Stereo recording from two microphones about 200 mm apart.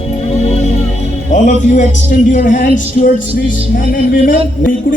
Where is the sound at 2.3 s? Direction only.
40° left (ahead or behind).